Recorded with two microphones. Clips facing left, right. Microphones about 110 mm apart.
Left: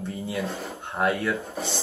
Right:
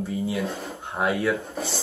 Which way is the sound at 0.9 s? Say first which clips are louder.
Right 1 dB; 5° right (ahead or behind).